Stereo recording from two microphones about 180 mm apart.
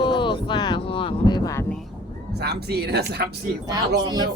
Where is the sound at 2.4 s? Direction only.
65° right (ahead or behind).